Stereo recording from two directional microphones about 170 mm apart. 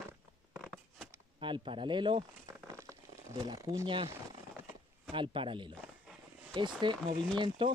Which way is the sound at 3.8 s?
30° right (ahead or behind).